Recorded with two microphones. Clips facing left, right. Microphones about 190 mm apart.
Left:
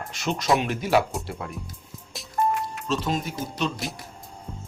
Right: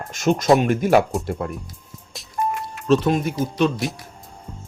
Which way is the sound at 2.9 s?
60° right (ahead or behind).